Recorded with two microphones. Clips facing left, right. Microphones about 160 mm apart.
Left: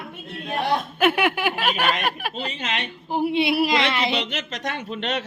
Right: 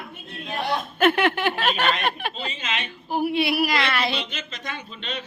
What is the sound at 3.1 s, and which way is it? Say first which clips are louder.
Speech: left 1 dB; 20° left (ahead or behind).